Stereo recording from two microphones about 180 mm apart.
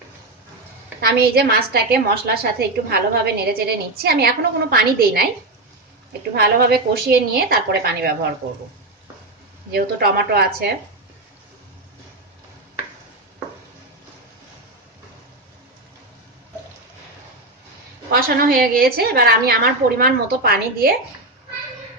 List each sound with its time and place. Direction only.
1.0 s a woman's voice: 60° right (ahead or behind)
6.3 s a woman's voice: 60° right (ahead or behind)
9.7 s a woman's voice: 60° right (ahead or behind)
18.1 s a woman's voice: 55° right (ahead or behind)